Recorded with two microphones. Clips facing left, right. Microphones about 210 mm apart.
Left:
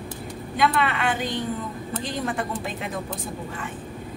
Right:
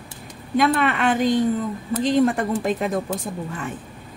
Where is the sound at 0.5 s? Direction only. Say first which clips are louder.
Right 4 dB; 45° right (ahead or behind).